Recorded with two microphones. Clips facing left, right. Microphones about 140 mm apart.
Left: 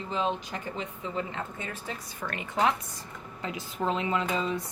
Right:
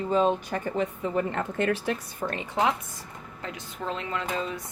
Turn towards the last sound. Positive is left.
turn(degrees=0)  # may be behind; listen again after turning